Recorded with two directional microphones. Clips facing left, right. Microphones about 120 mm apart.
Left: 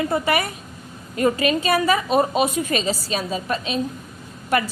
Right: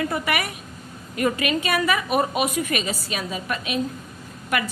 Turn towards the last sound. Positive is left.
turn(degrees=35)  # may be behind; listen again after turning